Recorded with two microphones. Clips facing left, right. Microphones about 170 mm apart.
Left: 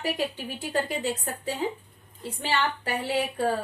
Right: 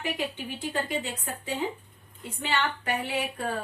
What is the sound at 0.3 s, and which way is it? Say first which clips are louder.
A woman's voice: left 2 dB; 40° left (ahead or behind).